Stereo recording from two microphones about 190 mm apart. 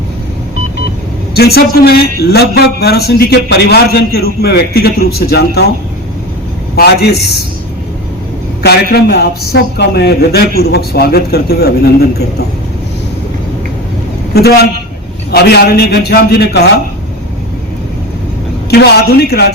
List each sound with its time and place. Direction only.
1.3 s a man's voice: 55° left (ahead or behind)
8.6 s a man's voice: 55° left (ahead or behind)
14.3 s a man's voice: 55° left (ahead or behind)
18.7 s a man's voice: 55° left (ahead or behind)